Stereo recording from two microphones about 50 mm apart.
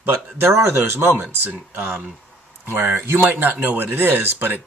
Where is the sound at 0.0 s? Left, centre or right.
Right.